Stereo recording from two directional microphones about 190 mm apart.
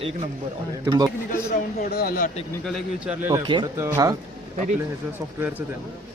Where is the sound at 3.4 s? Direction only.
25° right (ahead or behind).